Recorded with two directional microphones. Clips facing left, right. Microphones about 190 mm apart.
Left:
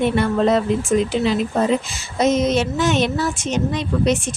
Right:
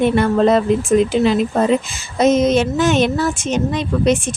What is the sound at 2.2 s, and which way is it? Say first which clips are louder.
Speech: right 4 dB; 50° right (ahead or behind).